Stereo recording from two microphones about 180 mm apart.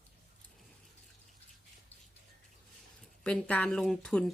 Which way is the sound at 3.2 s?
5° left (ahead or behind).